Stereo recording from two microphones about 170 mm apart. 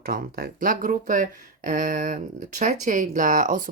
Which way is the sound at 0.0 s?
60° right (ahead or behind).